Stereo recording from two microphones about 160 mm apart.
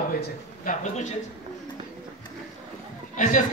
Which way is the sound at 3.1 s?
55° left (ahead or behind).